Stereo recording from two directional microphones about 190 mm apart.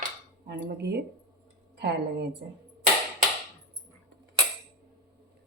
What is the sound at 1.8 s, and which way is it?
Speech, 60° right (ahead or behind).